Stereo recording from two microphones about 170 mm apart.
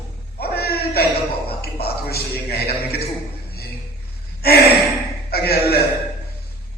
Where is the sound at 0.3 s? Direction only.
65° left (ahead or behind).